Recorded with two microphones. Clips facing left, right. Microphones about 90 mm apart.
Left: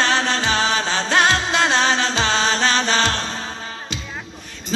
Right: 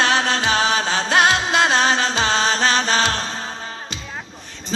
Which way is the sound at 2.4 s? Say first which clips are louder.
Right 1 dB; 40° right (ahead or behind).